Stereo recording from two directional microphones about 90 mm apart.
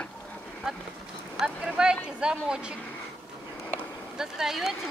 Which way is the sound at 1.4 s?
10° right (ahead or behind).